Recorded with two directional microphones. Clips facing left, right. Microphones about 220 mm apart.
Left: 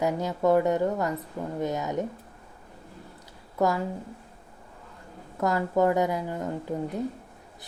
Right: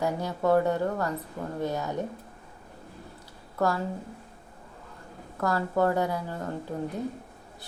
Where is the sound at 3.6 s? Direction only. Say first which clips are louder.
Left 2 dB; 20° left (ahead or behind).